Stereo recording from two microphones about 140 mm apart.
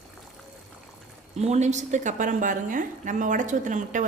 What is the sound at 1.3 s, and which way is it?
Speech, 50° right (ahead or behind).